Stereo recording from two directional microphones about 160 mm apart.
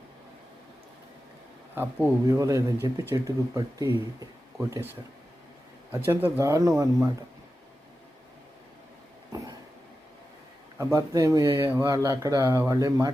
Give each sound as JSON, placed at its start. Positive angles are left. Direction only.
{"t": 1.7, "sound": "speech", "side_deg": -15}
{"t": 6.1, "sound": "speech", "side_deg": -10}
{"t": 10.8, "sound": "speech", "side_deg": -15}